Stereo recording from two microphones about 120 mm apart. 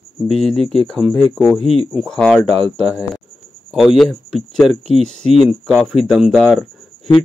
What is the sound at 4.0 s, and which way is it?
Speech, centre (ahead or behind).